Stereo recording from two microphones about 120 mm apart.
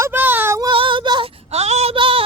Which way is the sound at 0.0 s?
15° right (ahead or behind).